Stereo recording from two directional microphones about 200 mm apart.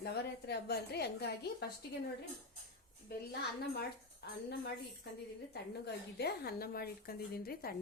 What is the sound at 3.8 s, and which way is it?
Speech, 55° left (ahead or behind).